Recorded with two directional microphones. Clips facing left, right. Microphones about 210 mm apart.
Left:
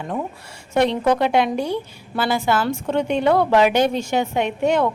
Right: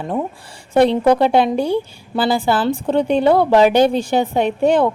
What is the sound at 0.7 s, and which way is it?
A woman's voice, 35° right (ahead or behind).